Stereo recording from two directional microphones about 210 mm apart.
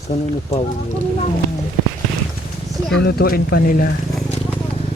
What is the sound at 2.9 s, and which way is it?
Speech, 55° left (ahead or behind).